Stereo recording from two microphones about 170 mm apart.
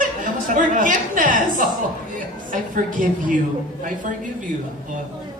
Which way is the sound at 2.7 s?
50° right (ahead or behind).